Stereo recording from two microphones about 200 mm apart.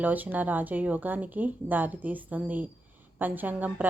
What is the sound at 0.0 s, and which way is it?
Speech, 10° right (ahead or behind).